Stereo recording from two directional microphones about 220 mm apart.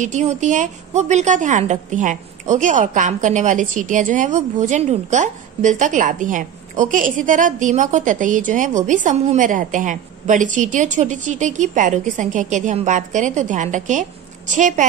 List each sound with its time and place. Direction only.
0.0 s a woman's voice: 35° right (ahead or behind)